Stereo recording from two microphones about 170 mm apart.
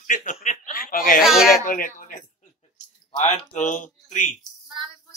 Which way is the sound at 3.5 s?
50° left (ahead or behind).